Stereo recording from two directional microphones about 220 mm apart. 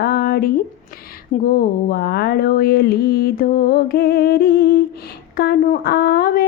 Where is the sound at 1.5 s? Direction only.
45° left (ahead or behind).